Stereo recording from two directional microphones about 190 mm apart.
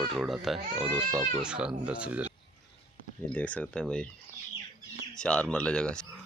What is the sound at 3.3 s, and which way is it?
Speech, 5° left (ahead or behind).